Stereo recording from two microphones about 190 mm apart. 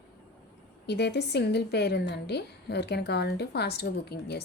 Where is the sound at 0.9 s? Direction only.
60° left (ahead or behind).